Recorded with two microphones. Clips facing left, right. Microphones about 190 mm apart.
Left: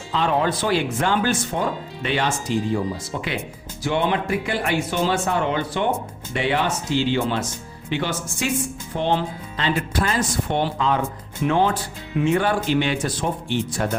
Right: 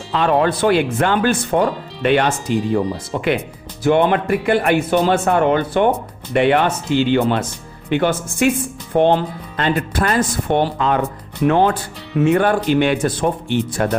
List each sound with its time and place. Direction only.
0.1 s speech: 60° right (ahead or behind)